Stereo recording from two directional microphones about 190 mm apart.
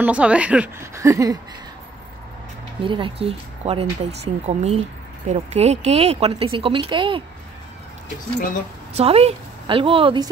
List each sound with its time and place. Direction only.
0.0 s a woman's voice: 5° right (ahead or behind)
2.8 s speech: 25° right (ahead or behind)
8.9 s speech: 30° right (ahead or behind)